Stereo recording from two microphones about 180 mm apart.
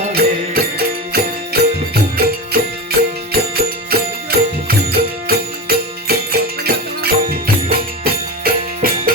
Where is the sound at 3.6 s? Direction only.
60° right (ahead or behind).